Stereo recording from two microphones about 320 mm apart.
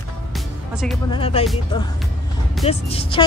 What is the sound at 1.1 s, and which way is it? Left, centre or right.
Speech, centre.